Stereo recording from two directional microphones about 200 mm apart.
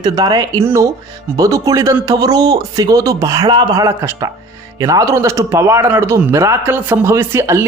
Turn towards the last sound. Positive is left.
turn(degrees=-15)  # may be behind; listen again after turning